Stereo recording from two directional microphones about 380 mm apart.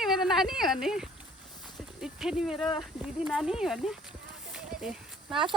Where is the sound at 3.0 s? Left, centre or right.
Centre.